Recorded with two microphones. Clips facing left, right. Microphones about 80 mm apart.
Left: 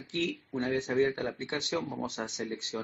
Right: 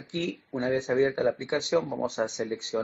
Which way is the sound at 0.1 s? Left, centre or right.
Right.